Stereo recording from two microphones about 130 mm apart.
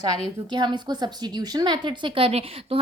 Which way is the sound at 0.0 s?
35° right (ahead or behind).